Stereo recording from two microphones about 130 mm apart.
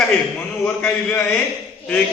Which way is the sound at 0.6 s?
10° left (ahead or behind).